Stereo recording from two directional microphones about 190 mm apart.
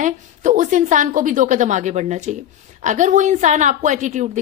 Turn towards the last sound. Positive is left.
turn(degrees=-40)  # may be behind; listen again after turning